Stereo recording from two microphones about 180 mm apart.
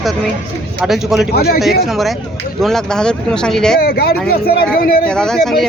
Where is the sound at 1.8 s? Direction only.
Centre (ahead or behind).